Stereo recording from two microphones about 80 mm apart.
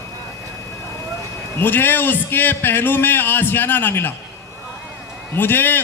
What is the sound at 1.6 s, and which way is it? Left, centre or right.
A man's voice, left.